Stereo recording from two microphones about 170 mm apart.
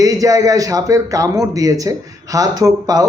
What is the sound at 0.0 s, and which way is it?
A man's voice, 20° right (ahead or behind).